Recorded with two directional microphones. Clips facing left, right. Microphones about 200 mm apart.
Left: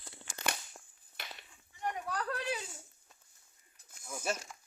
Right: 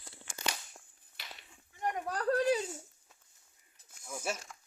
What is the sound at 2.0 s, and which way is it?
Speech, 40° right (ahead or behind).